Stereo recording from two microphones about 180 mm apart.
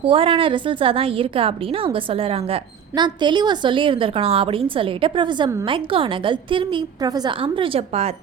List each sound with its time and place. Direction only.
0.0 s a woman's voice: 30° right (ahead or behind)